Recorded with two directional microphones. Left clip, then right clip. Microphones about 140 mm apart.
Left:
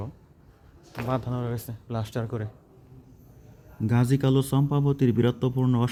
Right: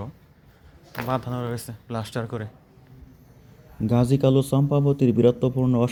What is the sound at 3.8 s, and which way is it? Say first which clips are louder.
Speech: right 5 dB; 20° left (ahead or behind).